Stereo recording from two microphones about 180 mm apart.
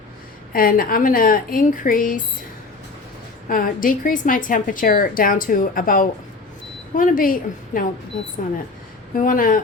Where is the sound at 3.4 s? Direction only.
50° left (ahead or behind).